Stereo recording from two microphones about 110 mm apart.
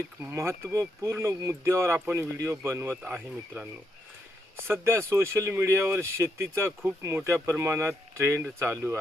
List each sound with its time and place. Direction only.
0.2 s speech: 25° right (ahead or behind)
4.7 s speech: 25° right (ahead or behind)